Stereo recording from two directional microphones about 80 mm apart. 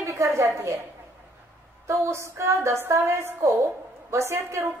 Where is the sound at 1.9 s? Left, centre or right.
Right.